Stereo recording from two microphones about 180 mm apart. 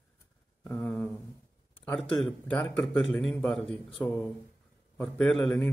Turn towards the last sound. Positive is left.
turn(degrees=5)  # may be behind; listen again after turning